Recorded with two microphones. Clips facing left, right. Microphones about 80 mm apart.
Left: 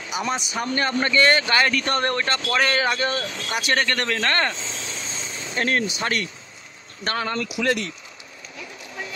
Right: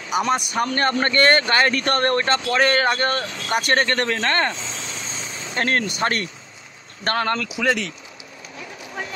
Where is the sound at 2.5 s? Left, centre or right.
Right.